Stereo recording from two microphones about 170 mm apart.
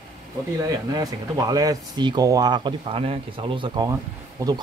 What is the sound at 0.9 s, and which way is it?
Speech, 20° right (ahead or behind).